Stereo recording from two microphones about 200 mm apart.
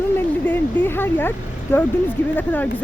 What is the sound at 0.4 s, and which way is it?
Speech, 10° left (ahead or behind).